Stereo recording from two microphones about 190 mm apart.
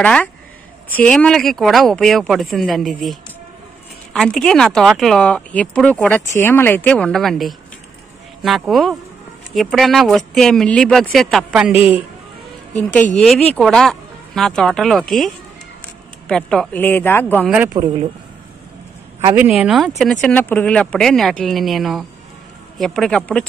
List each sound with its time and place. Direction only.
0.0 s speech: 5° left (ahead or behind)
13.1 s speech: centre (ahead or behind)
17.8 s speech: 20° right (ahead or behind)
19.3 s speech: 5° right (ahead or behind)